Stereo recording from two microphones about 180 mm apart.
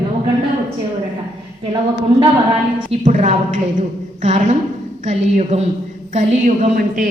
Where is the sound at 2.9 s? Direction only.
40° right (ahead or behind).